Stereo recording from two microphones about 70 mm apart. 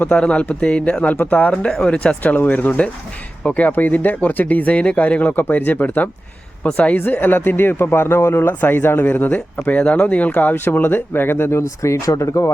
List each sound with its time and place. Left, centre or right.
0.0 s speech: centre
10.5 s speech: left